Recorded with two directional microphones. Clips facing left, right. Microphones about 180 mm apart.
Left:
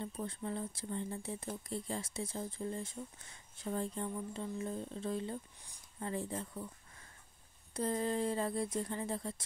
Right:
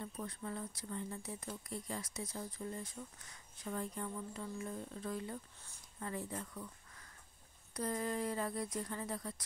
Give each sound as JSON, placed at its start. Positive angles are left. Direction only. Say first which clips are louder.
{"t": 0.0, "sound": "speech", "louder": "left 4 dB", "side_deg": 25}